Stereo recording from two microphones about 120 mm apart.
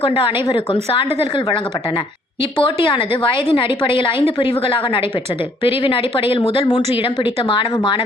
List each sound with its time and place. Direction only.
0.0 s speech: 45° left (ahead or behind)